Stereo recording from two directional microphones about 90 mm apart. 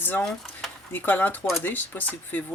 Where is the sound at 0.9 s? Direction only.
20° left (ahead or behind).